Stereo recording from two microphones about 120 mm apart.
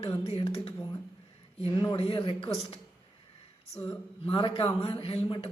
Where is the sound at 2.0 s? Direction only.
50° left (ahead or behind).